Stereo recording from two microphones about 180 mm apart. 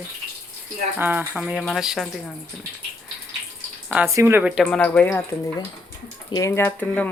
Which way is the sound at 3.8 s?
5° right (ahead or behind).